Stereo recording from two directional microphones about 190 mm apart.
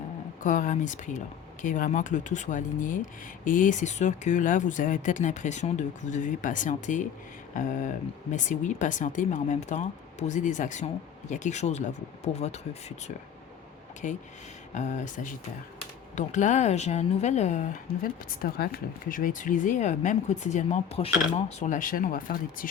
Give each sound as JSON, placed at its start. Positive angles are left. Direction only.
{"t": 0.4, "sound": "speech", "side_deg": 45}
{"t": 14.0, "sound": "speech", "side_deg": 40}